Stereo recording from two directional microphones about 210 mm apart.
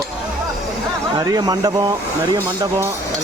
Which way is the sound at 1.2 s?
20° right (ahead or behind).